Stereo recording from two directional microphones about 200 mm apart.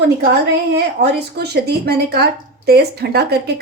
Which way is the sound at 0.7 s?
55° right (ahead or behind).